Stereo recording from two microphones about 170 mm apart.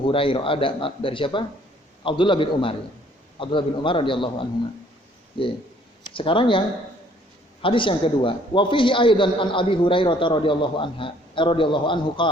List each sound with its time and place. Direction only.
0.0 s a man's voice: 30° left (ahead or behind)
7.6 s a man's voice: 30° left (ahead or behind)